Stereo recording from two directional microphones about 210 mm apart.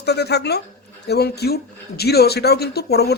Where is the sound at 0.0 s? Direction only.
50° left (ahead or behind).